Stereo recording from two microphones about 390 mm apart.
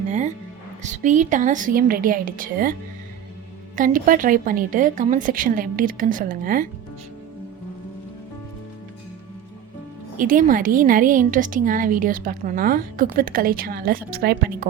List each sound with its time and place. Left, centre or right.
0.1 s music: centre
0.8 s a woman's voice: centre
3.8 s a woman's voice: centre
10.2 s a woman's voice: centre